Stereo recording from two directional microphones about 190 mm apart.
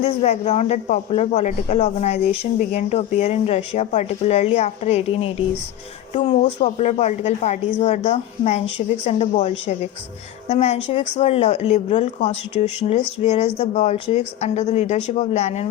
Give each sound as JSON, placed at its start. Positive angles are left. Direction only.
{"t": 0.0, "sound": "speech", "side_deg": 35}